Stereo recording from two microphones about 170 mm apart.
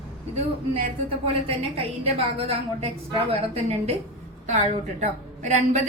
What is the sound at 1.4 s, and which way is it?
A woman's voice, 35° right (ahead or behind).